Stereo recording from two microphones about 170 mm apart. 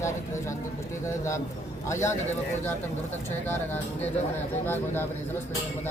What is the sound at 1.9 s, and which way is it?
Speech, 15° left (ahead or behind).